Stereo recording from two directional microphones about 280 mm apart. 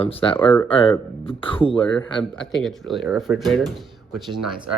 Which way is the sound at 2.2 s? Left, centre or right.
Centre.